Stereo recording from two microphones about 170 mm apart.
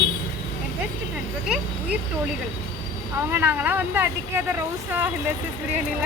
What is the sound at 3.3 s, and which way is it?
Speech, 10° right (ahead or behind).